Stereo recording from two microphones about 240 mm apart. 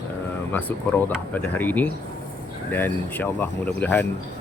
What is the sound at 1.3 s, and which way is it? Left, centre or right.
Speech, centre.